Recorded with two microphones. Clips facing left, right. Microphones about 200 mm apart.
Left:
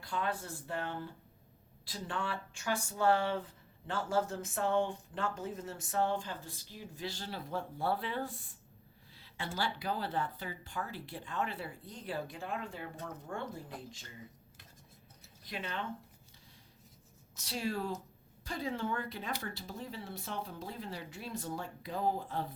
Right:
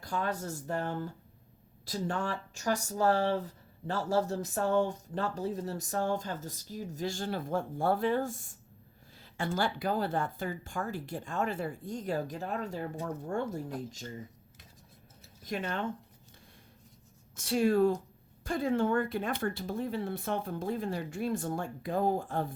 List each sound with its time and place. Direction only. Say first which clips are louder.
0.0 s speech: right 3 dB; 40° right (ahead or behind)
9.1 s a sound: right 7 dB; 45° right (ahead or behind)
9.6 s speech: right 5 dB; 50° right (ahead or behind)
15.4 s speech: right 6 dB; 45° right (ahead or behind)
17.3 s speech: right 11 dB; 50° right (ahead or behind)